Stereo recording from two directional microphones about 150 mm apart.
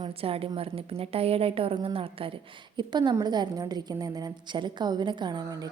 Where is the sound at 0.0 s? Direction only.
40° right (ahead or behind).